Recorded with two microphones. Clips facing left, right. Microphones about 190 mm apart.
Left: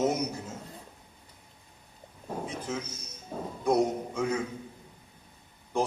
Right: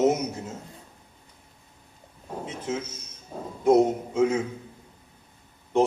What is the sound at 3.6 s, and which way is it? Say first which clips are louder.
Speech: right 6 dB; 25° right (ahead or behind).